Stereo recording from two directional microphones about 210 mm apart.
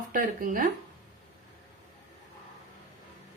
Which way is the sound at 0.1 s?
40° right (ahead or behind).